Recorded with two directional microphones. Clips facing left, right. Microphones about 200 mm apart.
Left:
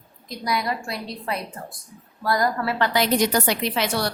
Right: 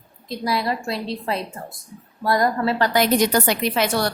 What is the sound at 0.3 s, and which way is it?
A woman's voice, 30° right (ahead or behind).